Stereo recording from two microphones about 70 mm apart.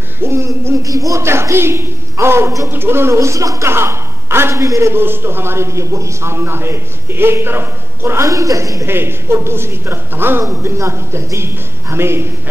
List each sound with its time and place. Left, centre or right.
0.2 s a man's voice: right
0.8 s speech: right
1.2 s a man's voice: right
8.3 s a woman's voice: right
8.8 s a man's voice: right
10.4 s a man's voice: right